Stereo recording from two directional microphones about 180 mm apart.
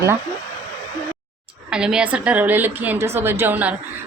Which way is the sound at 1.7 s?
5° right (ahead or behind).